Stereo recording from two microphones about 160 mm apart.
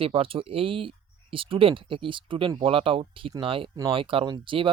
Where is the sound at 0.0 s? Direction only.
35° right (ahead or behind).